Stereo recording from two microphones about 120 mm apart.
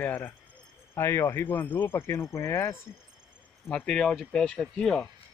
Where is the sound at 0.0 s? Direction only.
15° left (ahead or behind).